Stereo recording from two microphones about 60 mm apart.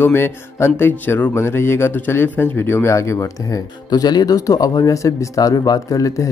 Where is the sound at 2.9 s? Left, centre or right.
Left.